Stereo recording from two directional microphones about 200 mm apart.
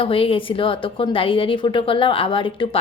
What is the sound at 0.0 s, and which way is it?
A woman's voice, 25° left (ahead or behind).